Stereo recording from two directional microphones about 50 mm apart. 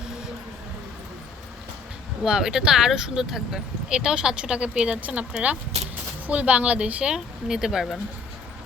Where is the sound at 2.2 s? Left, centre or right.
Centre.